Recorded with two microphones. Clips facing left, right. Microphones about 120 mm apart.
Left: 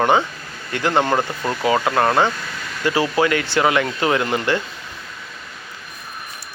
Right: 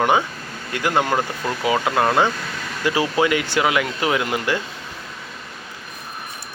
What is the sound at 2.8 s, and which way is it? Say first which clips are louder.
Speech: left 1 dB; 15° right (ahead or behind).